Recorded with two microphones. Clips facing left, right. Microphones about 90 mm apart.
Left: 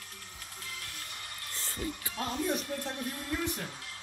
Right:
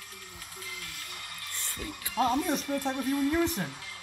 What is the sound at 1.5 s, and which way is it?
Music, 35° left (ahead or behind).